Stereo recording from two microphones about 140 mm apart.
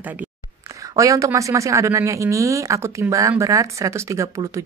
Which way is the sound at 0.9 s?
25° right (ahead or behind).